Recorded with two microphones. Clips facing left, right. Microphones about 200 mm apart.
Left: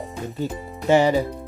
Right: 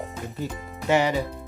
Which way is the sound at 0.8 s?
30° left (ahead or behind).